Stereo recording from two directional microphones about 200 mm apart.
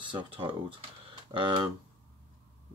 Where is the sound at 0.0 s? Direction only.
25° right (ahead or behind).